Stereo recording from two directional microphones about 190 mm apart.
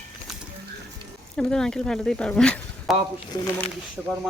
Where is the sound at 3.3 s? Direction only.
25° left (ahead or behind).